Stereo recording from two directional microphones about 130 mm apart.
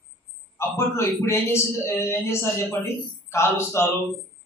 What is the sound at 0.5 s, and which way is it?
A man's voice, 20° left (ahead or behind).